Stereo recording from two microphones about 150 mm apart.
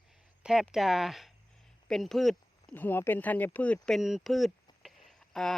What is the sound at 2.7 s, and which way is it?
Speech, 15° left (ahead or behind).